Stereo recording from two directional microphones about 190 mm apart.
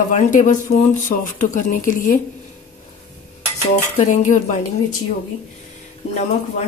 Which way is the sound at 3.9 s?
40° left (ahead or behind).